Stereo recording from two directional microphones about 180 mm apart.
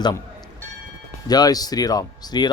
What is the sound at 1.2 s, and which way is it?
Speech, 20° left (ahead or behind).